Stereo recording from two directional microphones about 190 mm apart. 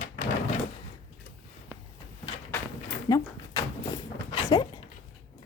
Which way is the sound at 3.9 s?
20° left (ahead or behind).